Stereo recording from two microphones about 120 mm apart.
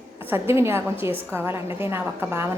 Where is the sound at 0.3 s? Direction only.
20° right (ahead or behind).